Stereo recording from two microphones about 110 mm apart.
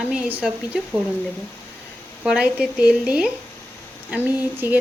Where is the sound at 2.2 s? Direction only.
10° right (ahead or behind).